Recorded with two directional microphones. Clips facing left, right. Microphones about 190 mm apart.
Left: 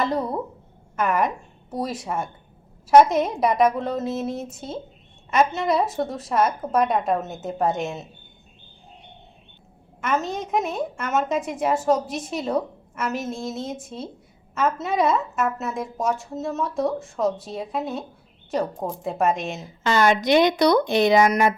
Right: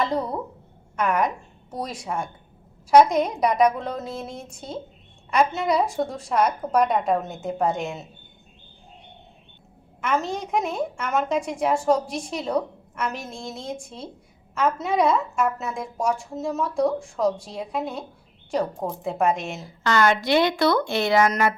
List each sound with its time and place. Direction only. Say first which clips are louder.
0.0 s a woman's voice: left 1 dB; centre (ahead or behind)
10.0 s a woman's voice: even; centre (ahead or behind)
19.5 s a woman's voice: left 1 dB; 20° left (ahead or behind)